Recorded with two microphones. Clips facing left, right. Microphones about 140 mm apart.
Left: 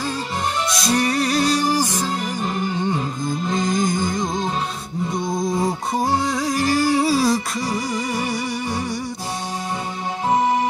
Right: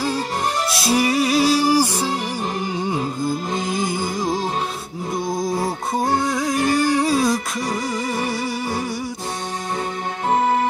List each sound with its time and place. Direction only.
0.7 s music: 5° right (ahead or behind)
10.3 s music: 15° left (ahead or behind)